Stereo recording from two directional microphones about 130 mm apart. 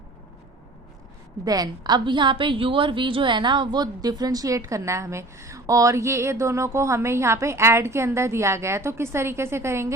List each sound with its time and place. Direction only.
1.5 s a woman's voice: 30° right (ahead or behind)